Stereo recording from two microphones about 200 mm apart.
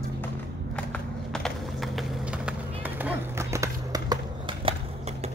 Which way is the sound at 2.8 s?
10° right (ahead or behind).